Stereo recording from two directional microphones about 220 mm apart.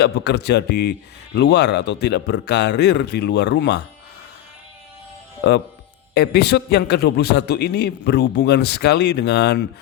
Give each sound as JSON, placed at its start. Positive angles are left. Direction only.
{"t": 0.0, "sound": "a man's voice", "side_deg": 50}
{"t": 5.4, "sound": "a man's voice", "side_deg": 50}